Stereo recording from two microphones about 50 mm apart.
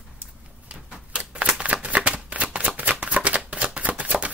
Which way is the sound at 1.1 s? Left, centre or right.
Right.